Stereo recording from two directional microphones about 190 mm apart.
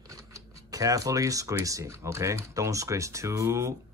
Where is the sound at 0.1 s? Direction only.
15° right (ahead or behind).